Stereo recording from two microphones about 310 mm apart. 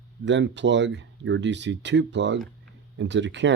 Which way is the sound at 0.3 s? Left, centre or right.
Right.